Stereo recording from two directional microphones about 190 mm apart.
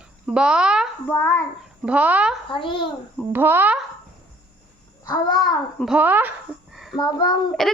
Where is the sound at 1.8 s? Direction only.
5° right (ahead or behind).